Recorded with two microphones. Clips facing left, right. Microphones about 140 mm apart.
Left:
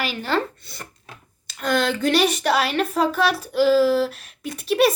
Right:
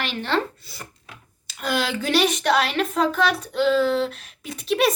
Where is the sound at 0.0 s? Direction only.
5° left (ahead or behind).